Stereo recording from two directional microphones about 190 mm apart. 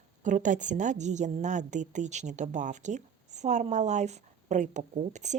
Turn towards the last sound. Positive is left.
turn(degrees=-40)  # may be behind; listen again after turning